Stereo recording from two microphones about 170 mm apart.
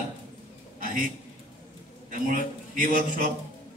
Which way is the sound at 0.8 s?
50° right (ahead or behind).